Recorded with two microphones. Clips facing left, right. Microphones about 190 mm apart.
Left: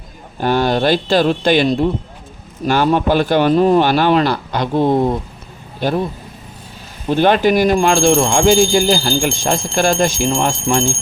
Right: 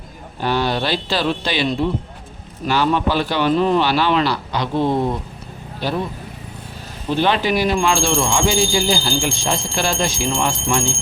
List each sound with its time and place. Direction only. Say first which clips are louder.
0.3 s speech: left 5 dB; 45° left (ahead or behind)
7.1 s speech: left 5 dB; 50° left (ahead or behind)